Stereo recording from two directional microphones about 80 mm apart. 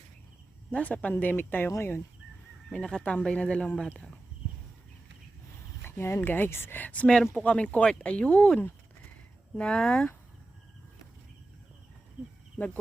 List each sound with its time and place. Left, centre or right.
0.7 s speech: centre
2.7 s speech: centre
5.8 s speech: left; by 10.1 s centre
12.5 s speech: centre